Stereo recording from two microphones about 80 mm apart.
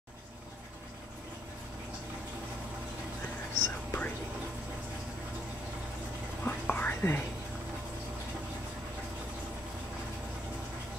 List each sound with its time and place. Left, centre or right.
3.6 s whispering: left
6.4 s whispering: left